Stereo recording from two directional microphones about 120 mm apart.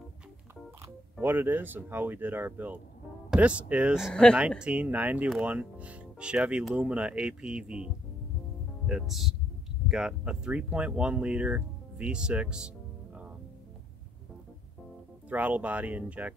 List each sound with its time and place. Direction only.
1.2 s speech: 15° right (ahead or behind)
4.1 s speech: 5° left (ahead or behind)
4.4 s speech: 10° right (ahead or behind)
15.2 s speech: 10° right (ahead or behind)